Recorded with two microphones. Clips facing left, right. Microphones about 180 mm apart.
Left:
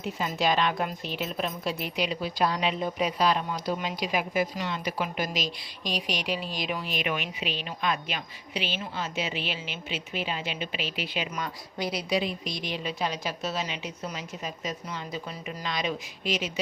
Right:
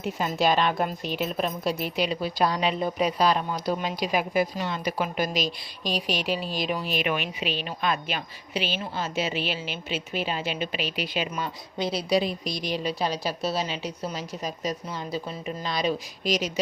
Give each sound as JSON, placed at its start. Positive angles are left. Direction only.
{"t": 0.0, "sound": "a woman's voice", "side_deg": -40}
{"t": 11.3, "sound": "a woman's voice", "side_deg": -30}